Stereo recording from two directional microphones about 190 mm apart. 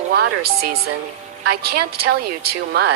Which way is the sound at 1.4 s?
55° right (ahead or behind).